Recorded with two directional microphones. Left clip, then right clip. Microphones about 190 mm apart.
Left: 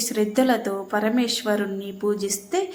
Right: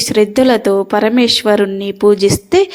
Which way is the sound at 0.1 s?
40° right (ahead or behind).